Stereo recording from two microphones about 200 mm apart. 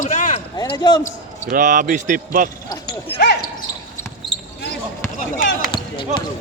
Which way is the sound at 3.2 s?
55° left (ahead or behind).